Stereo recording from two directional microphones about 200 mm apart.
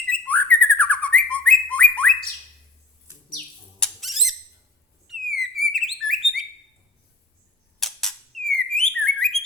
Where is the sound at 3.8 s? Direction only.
Centre (ahead or behind).